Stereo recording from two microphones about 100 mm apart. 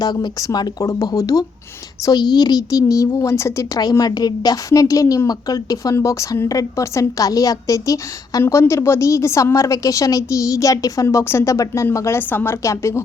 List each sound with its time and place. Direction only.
0.0 s a woman's voice: 45° left (ahead or behind)
2.0 s a woman's voice: 45° left (ahead or behind); by 3.7 s 30° left (ahead or behind)
3.8 s a woman's voice: 40° left (ahead or behind)